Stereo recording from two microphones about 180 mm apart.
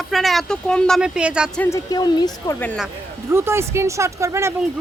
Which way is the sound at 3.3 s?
15° right (ahead or behind).